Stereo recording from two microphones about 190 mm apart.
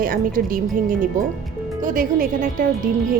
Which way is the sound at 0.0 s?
50° right (ahead or behind).